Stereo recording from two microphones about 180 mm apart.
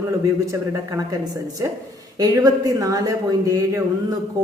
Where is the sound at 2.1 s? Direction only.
20° right (ahead or behind).